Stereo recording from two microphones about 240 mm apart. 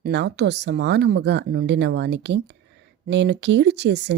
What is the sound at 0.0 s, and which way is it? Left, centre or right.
Speech, right.